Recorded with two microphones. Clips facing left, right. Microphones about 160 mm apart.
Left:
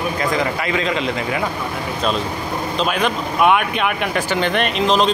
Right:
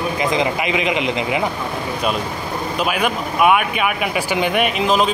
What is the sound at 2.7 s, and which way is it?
Speech, 10° right (ahead or behind).